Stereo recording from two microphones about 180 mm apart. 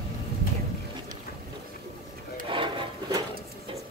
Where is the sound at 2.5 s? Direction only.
30° right (ahead or behind).